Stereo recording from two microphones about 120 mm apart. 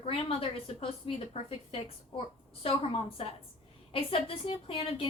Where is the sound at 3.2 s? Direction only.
50° left (ahead or behind).